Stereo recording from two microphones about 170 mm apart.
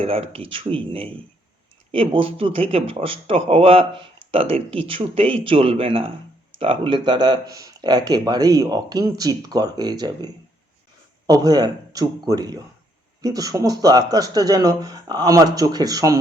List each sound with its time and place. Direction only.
0.0 s speech: 35° right (ahead or behind)
11.3 s speech: 25° right (ahead or behind)